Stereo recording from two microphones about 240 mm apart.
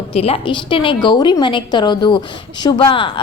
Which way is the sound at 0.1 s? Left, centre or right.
Left.